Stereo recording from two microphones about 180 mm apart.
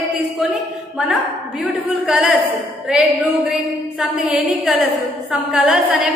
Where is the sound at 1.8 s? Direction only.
5° right (ahead or behind).